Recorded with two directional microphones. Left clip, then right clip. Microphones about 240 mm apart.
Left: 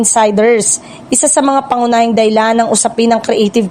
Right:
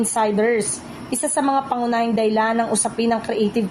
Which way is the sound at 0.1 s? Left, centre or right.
Left.